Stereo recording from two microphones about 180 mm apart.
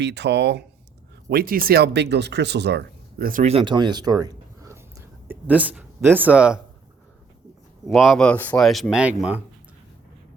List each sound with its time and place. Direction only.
0.0 s speech: 70° right (ahead or behind)
1.3 s speech: 55° right (ahead or behind)
3.4 s speech: 30° right (ahead or behind); by 6.6 s 5° right (ahead or behind)
7.9 s speech: centre (ahead or behind)